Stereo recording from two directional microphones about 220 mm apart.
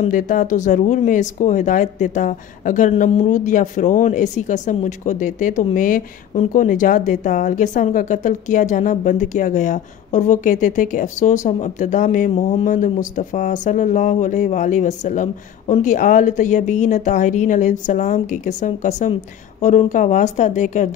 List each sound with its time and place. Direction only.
0.0 s speech: 35° left (ahead or behind)